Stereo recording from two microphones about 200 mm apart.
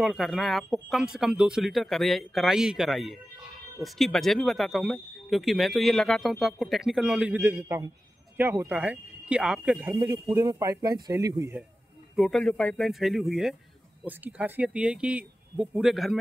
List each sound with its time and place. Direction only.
0.0 s speech: centre (ahead or behind)
9.8 s speech: 15° right (ahead or behind)
12.2 s speech: centre (ahead or behind)